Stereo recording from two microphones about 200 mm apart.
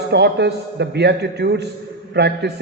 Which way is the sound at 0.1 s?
55° right (ahead or behind).